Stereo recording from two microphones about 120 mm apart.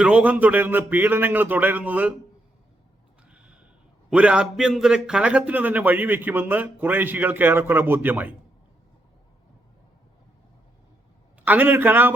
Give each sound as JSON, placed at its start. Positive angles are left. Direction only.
{"t": 0.0, "sound": "a man's voice", "side_deg": -10}
{"t": 3.2, "sound": "a sound", "side_deg": -10}
{"t": 4.1, "sound": "a man's voice", "side_deg": -10}
{"t": 11.4, "sound": "a man's voice", "side_deg": -15}